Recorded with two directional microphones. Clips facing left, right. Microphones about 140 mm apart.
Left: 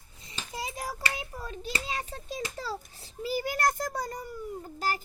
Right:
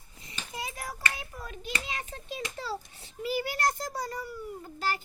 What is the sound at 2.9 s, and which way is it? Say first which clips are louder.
Child singing: even; 35° left (ahead or behind).